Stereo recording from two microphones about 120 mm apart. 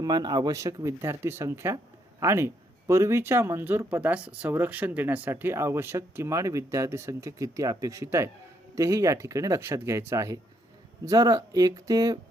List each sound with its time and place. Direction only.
0.0 s speech: 35° right (ahead or behind)